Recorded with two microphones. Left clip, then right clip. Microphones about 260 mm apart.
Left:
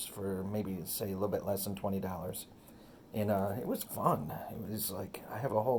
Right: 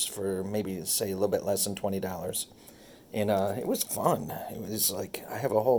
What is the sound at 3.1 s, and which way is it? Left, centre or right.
Speech, right.